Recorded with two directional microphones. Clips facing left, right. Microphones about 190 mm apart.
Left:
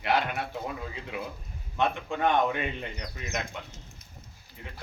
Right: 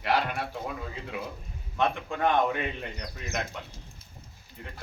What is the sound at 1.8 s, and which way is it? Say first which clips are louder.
A man's voice: even; centre (ahead or behind).